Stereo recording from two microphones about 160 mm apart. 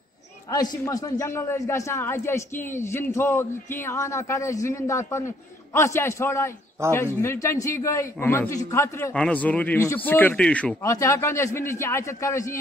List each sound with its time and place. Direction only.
0.5 s a man's voice: 25° left (ahead or behind); by 10.9 s 10° left (ahead or behind)
10.9 s a man's voice: 20° left (ahead or behind)